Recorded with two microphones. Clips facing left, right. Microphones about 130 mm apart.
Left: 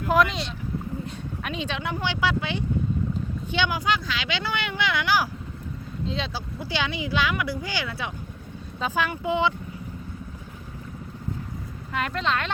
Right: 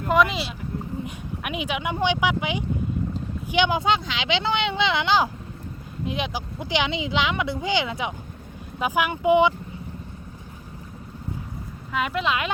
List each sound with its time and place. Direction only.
0.1 s speech: centre (ahead or behind); by 9.6 s 15° right (ahead or behind)
11.9 s speech: 5° right (ahead or behind)